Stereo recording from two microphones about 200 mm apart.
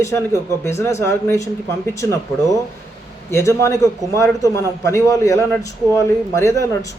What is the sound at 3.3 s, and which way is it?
A man's voice, 15° left (ahead or behind).